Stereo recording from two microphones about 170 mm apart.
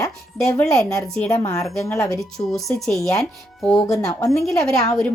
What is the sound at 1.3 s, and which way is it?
Speech, 20° left (ahead or behind).